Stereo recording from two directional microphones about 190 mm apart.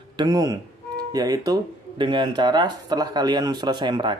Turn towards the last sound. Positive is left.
turn(degrees=-25)  # may be behind; listen again after turning